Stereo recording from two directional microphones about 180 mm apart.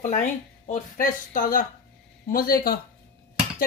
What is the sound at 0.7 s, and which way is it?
A woman's voice, 45° left (ahead or behind).